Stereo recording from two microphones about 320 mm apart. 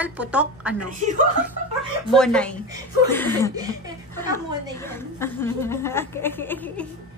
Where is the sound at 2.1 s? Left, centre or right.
Centre.